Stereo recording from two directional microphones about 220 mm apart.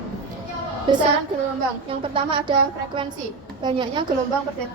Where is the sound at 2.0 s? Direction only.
25° right (ahead or behind).